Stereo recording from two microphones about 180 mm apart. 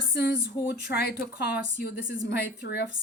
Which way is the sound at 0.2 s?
65° left (ahead or behind).